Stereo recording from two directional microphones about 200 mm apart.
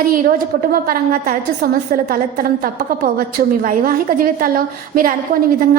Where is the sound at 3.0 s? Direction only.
45° right (ahead or behind).